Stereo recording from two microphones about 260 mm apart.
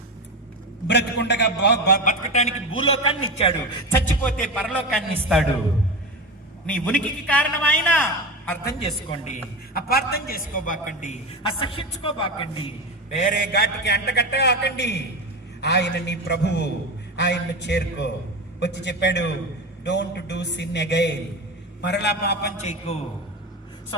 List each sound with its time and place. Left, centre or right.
0.9 s a man's voice: left
2.9 s a man's voice: left
3.9 s a man's voice: centre
6.7 s a man's voice: centre
8.8 s a man's voice: left